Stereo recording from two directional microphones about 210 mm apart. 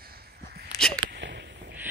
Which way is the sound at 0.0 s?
45° right (ahead or behind).